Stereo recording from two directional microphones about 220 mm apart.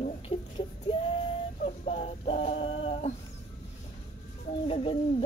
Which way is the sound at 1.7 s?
25° left (ahead or behind).